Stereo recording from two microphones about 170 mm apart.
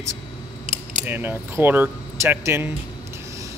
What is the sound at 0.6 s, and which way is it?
Mechanisms, 45° right (ahead or behind).